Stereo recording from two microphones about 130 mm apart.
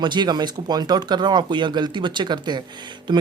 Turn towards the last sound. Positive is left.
turn(degrees=-35)  # may be behind; listen again after turning